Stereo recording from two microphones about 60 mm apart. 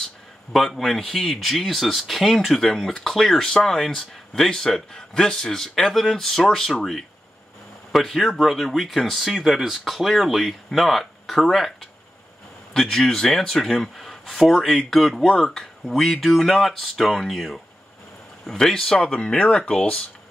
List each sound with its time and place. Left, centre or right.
0.5 s speech: centre
19.3 s speech: left